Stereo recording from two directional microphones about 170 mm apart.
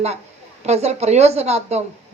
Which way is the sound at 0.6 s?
40° right (ahead or behind).